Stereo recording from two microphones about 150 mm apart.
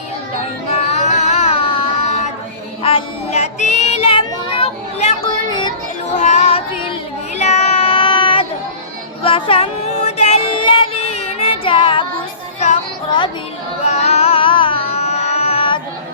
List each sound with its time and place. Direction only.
0.7 s a sound: 50° left (ahead or behind)
2.8 s child singing: 45° left (ahead or behind)
5.5 s music: 30° left (ahead or behind)
6.1 s music: 50° left (ahead or behind)
7.3 s child singing: 45° left (ahead or behind)
12.5 s music: 45° left (ahead or behind)
13.8 s carnatic music: 50° left (ahead or behind)